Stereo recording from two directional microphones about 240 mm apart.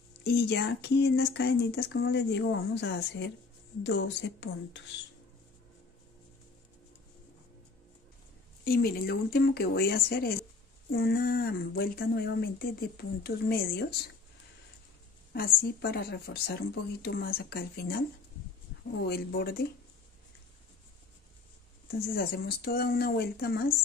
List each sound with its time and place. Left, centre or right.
0.2 s speech: left
8.6 s speech: left
15.3 s speech: left
19.0 s speech: left
21.9 s speech: left